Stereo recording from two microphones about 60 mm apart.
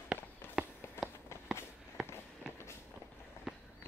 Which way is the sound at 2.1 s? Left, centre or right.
Left.